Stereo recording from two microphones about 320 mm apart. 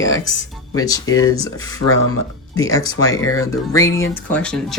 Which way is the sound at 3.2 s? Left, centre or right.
Left.